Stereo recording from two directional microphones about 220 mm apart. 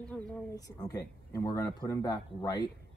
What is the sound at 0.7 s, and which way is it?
Speech, 15° left (ahead or behind).